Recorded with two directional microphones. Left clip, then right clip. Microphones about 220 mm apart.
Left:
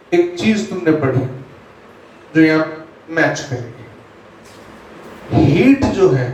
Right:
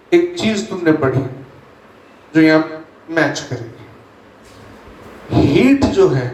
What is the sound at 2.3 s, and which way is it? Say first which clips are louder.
Speech: right 1 dB; 40° right (ahead or behind).